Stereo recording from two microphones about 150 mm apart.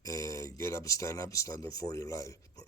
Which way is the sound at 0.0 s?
20° left (ahead or behind).